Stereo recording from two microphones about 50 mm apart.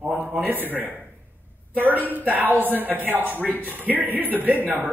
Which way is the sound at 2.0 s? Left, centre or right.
Right.